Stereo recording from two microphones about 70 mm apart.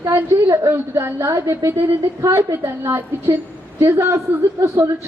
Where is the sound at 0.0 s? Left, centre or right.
Right.